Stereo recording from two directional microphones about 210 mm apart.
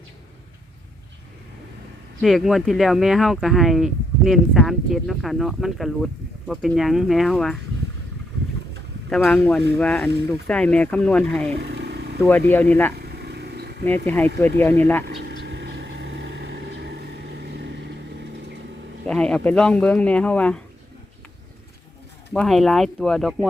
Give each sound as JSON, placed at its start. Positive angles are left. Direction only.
{"t": 2.2, "sound": "speech", "side_deg": 0}
{"t": 9.0, "sound": "speech", "side_deg": 5}
{"t": 11.6, "sound": "vehicle", "side_deg": -50}
{"t": 12.2, "sound": "speech", "side_deg": 10}
{"t": 13.0, "sound": "vehicle", "side_deg": -50}
{"t": 13.8, "sound": "speech", "side_deg": 10}
{"t": 15.3, "sound": "vehicle", "side_deg": -55}
{"t": 19.0, "sound": "speech", "side_deg": 5}
{"t": 22.3, "sound": "speech", "side_deg": 0}